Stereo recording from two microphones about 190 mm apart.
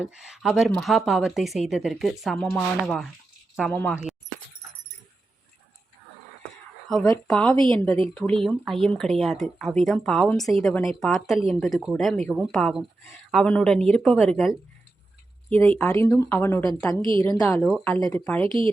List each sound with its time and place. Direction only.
0.0 s speech: 5° right (ahead or behind)
6.8 s speech: centre (ahead or behind)
15.5 s speech: 5° left (ahead or behind)
17.0 s a woman's voice: 25° right (ahead or behind)
17.5 s speech: 5° left (ahead or behind)